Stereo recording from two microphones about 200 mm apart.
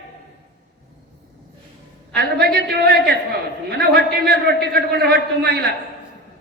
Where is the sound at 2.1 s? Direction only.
50° right (ahead or behind).